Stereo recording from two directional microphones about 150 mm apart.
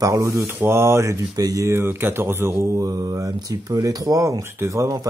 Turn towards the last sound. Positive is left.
turn(degrees=-20)  # may be behind; listen again after turning